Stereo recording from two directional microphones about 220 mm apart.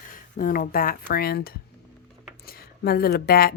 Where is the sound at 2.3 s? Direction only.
45° left (ahead or behind).